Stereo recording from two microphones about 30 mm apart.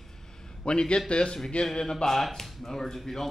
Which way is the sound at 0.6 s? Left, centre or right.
Left.